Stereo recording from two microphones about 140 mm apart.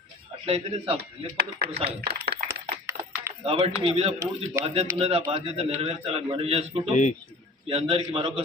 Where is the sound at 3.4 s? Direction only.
40° right (ahead or behind).